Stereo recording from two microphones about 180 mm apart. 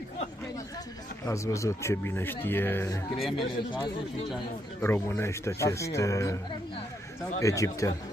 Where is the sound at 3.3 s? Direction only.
Centre (ahead or behind).